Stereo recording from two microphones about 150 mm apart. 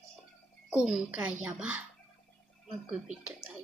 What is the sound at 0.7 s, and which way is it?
A child's voice, 5° right (ahead or behind).